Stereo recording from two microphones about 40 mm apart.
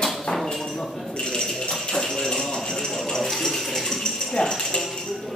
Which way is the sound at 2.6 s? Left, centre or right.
Centre.